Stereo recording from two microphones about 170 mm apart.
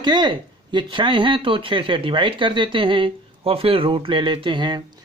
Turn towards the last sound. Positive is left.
turn(degrees=-25)  # may be behind; listen again after turning